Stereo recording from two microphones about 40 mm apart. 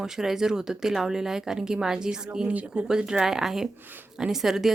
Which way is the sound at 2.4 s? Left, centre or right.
Right.